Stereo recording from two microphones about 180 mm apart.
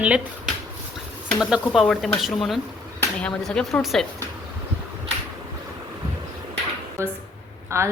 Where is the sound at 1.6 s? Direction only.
Centre (ahead or behind).